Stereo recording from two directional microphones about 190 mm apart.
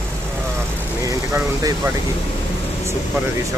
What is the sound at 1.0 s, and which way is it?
Speech, 15° right (ahead or behind).